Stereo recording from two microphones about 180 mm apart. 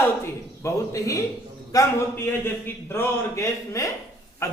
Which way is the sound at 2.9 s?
15° left (ahead or behind).